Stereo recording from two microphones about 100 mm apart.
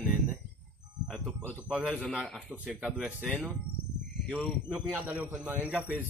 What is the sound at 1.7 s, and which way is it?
Speech, 5° right (ahead or behind).